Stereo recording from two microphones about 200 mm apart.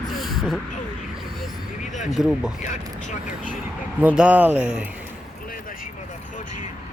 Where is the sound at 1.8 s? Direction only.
35° left (ahead or behind).